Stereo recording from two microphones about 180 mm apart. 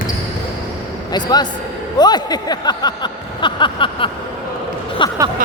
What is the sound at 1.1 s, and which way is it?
Speech, 20° left (ahead or behind).